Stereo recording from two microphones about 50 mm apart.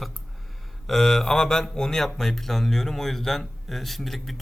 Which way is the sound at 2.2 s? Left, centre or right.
Centre.